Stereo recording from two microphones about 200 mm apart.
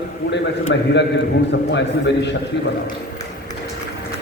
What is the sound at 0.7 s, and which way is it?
A man's voice, 65° left (ahead or behind).